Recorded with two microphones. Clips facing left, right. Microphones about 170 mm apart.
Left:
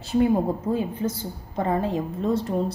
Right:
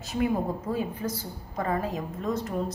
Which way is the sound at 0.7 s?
25° left (ahead or behind).